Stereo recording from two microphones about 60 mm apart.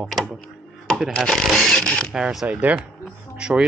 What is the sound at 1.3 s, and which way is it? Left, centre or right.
Speech, centre.